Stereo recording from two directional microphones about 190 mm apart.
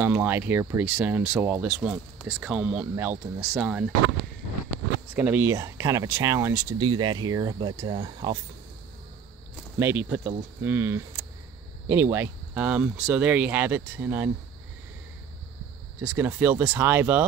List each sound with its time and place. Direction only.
0.0 s speech: 10° right (ahead or behind)
5.1 s speech: 10° right (ahead or behind)
6.8 s speech: 25° right (ahead or behind)
9.8 s speech: 10° right (ahead or behind)
16.0 s speech: 5° right (ahead or behind)